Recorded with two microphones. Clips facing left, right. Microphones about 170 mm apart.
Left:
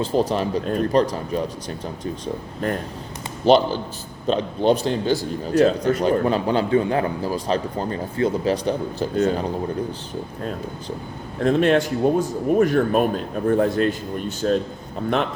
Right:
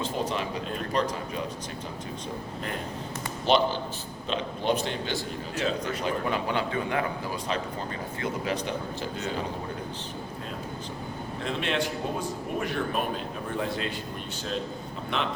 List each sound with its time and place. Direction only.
0.0 s a man's voice: 40° left (ahead or behind)
4.3 s a man's voice: 35° left (ahead or behind)
11.4 s speech: 45° left (ahead or behind)